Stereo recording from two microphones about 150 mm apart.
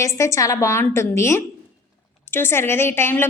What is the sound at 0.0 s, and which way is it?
A woman's voice, 20° left (ahead or behind).